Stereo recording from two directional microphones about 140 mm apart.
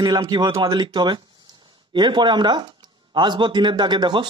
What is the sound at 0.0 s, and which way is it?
Speech, 35° right (ahead or behind).